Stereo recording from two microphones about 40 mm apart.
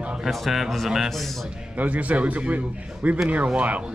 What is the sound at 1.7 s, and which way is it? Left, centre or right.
A man's voice, right.